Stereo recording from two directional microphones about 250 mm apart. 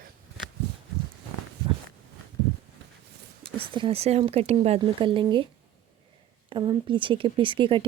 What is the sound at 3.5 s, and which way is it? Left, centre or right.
Speech, right.